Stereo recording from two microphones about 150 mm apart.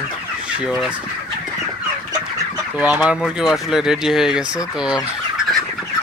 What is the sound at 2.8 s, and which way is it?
Speech, 10° right (ahead or behind).